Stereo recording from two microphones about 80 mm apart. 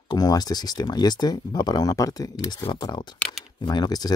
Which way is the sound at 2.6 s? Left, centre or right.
Left.